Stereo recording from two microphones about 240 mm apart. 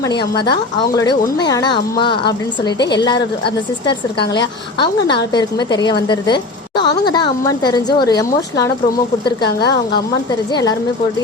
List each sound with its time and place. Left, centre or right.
0.1 s a woman's voice: centre
9.4 s a woman's voice: left
10.5 s a woman's voice: centre